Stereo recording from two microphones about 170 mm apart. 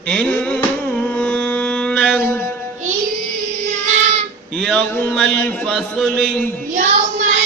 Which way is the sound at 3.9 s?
40° right (ahead or behind).